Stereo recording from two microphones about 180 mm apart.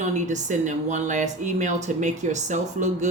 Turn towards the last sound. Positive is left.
turn(degrees=-40)  # may be behind; listen again after turning